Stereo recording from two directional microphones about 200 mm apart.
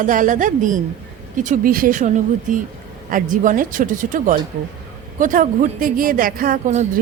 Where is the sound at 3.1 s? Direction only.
40° right (ahead or behind).